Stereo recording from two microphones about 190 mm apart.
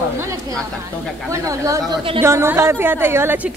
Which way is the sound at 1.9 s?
25° right (ahead or behind).